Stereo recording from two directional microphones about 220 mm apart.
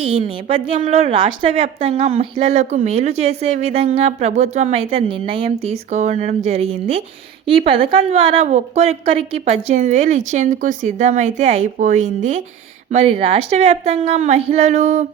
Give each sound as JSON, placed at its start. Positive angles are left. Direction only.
{"t": 0.0, "sound": "a woman's voice", "side_deg": -25}